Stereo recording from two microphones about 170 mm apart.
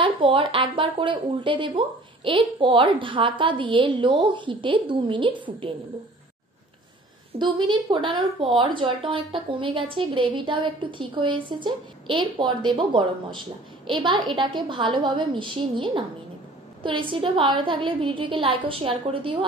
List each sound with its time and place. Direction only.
0.0 s speech: 30° right (ahead or behind)
7.3 s a woman's voice: 25° right (ahead or behind)